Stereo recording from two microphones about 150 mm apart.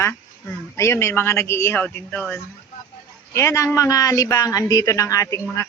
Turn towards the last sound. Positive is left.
turn(degrees=20)  # may be behind; listen again after turning